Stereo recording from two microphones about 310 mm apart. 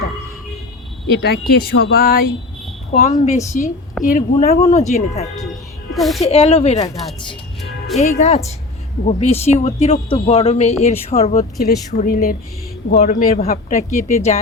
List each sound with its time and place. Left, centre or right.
1.2 s speech: left
3.3 s speech: centre
4.0 s speech: left
5.9 s a woman's voice: centre
6.2 s speech: centre
7.6 s music: centre
8.0 s speech: left
13.7 s speech: centre